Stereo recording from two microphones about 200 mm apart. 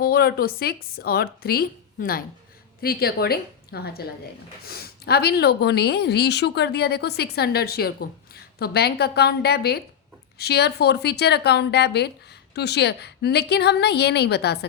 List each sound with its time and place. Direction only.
0.0 s a woman's voice: 50° left (ahead or behind)